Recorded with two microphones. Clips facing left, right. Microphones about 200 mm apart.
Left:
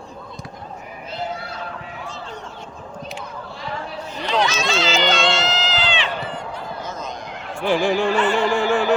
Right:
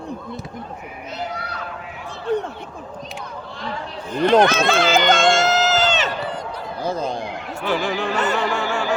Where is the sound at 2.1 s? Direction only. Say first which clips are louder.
Right 11 dB; 60° right (ahead or behind).